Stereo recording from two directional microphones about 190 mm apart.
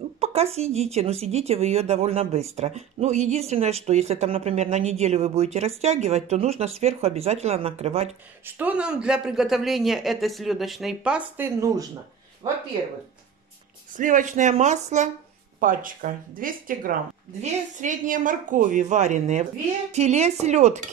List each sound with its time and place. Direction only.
0.2 s speech: 35° right (ahead or behind)
8.5 s speech: 10° right (ahead or behind)
13.9 s speech: 45° right (ahead or behind)